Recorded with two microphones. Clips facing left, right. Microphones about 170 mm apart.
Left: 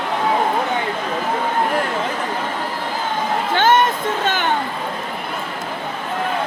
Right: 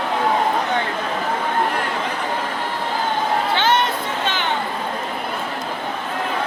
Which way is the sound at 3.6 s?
45° left (ahead or behind).